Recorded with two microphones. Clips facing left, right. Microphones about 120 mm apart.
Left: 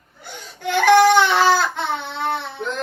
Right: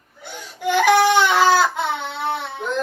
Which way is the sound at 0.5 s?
10° right (ahead or behind).